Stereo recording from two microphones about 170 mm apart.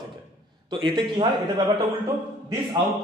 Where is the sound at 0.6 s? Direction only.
30° right (ahead or behind).